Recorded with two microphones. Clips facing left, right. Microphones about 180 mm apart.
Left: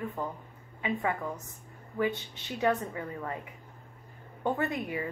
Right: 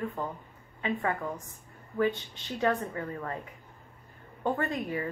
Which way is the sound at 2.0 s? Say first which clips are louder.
Right 2 dB; 15° left (ahead or behind).